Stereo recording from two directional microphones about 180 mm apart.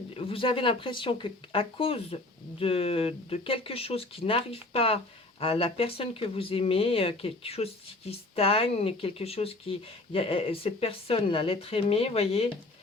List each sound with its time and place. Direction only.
0.3 s speech: 30° left (ahead or behind)